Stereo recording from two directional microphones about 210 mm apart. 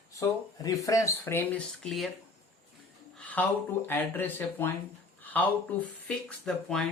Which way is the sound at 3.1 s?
5° left (ahead or behind).